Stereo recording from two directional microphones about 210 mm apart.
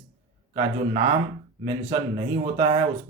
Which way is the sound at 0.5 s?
20° right (ahead or behind).